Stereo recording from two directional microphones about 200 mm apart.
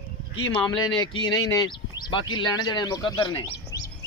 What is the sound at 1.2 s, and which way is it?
A man's voice, 20° left (ahead or behind).